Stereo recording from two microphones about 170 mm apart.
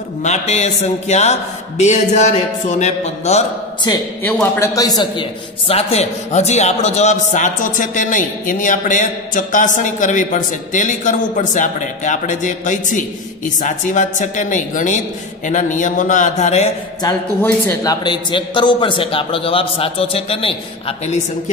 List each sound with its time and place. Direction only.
0.2 s a man's voice: 40° left (ahead or behind)
4.3 s a man's voice: 15° left (ahead or behind)
5.7 s a man's voice: 35° left (ahead or behind)
18.0 s a man's voice: 30° left (ahead or behind)